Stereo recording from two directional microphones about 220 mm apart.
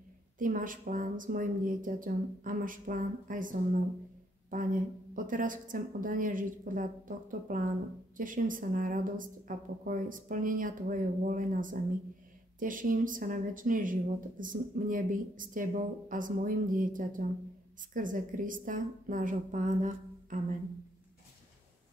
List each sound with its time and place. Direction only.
0.4 s a woman's voice: 40° right (ahead or behind)
5.1 s a woman's voice: 40° right (ahead or behind)